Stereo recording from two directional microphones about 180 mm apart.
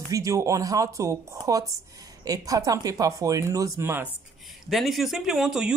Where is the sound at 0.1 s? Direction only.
20° right (ahead or behind).